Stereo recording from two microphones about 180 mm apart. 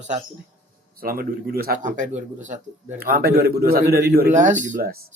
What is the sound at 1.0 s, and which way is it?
A man's voice, 55° right (ahead or behind).